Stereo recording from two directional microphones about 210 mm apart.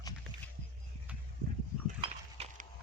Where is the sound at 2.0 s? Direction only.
30° right (ahead or behind).